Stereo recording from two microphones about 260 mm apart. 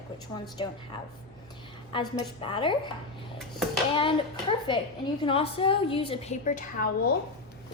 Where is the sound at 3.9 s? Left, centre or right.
Centre.